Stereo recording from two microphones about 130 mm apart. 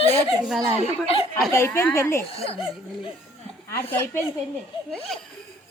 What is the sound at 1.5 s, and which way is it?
Speech, 20° left (ahead or behind).